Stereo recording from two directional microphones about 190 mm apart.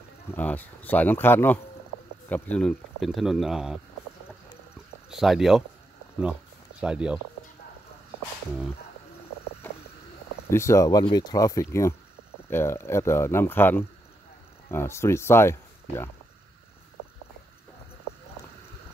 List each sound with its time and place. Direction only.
0.3 s speech: 10° left (ahead or behind)
5.1 s speech: centre (ahead or behind)
6.8 s speech: 5° right (ahead or behind)
9.6 s vehicle: 10° left (ahead or behind)
10.5 s speech: 15° left (ahead or behind)